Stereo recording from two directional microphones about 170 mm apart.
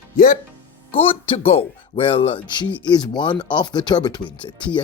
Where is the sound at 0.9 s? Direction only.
35° left (ahead or behind).